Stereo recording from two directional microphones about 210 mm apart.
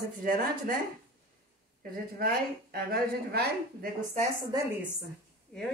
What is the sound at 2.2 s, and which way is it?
A woman's voice, 45° right (ahead or behind).